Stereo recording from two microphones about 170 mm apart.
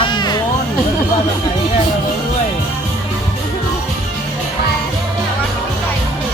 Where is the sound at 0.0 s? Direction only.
25° left (ahead or behind).